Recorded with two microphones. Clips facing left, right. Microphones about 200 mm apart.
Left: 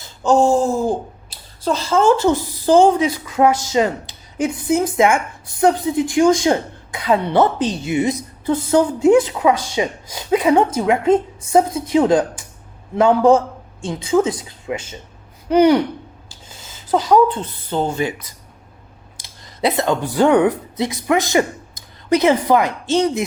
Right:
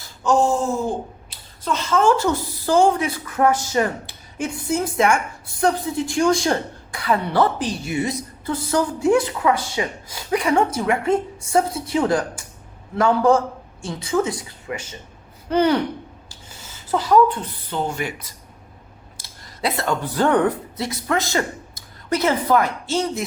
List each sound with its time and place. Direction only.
0.0 s a woman's voice: 30° left (ahead or behind)
16.9 s a woman's voice: 20° left (ahead or behind)